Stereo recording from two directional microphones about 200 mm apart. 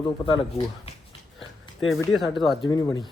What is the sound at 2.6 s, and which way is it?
Speech, 20° left (ahead or behind).